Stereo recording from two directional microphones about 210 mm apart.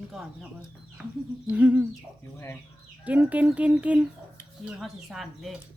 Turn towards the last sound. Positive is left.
turn(degrees=0)  # may be behind; listen again after turning